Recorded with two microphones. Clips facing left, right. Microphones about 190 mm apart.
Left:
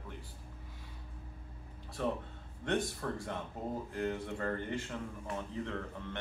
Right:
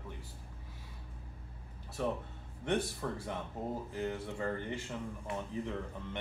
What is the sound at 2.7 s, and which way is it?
Speech, 10° right (ahead or behind).